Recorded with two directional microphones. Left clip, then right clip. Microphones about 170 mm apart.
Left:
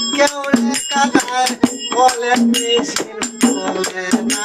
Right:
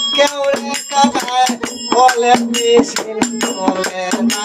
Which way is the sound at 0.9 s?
20° right (ahead or behind).